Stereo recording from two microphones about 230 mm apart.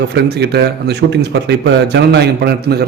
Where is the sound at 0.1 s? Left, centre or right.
Right.